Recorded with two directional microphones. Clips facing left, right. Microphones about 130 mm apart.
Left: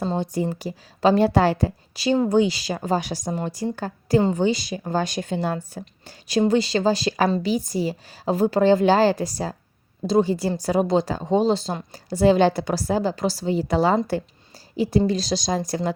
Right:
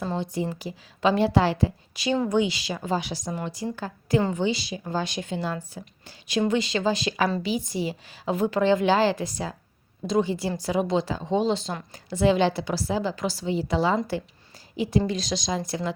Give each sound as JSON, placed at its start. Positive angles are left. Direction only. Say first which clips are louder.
{"t": 0.5, "sound": "a woman's voice", "louder": "left 4 dB", "side_deg": 40}